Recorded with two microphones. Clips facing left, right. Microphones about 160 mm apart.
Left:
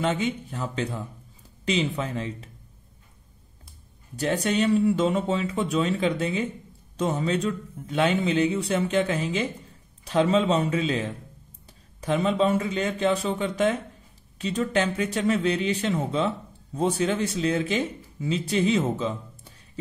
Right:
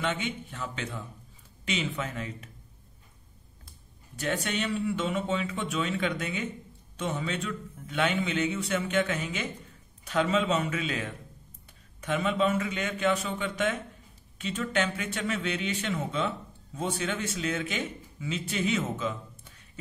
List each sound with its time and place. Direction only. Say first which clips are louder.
0.0 s a man's voice: left 6 dB; 35° left (ahead or behind)
4.2 s a man's voice: left 7 dB; 35° left (ahead or behind)